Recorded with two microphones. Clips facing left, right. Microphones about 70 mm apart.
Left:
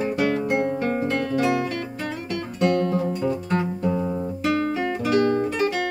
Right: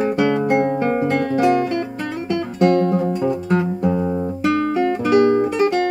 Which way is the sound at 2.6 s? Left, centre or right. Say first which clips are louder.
Right 5 dB; right.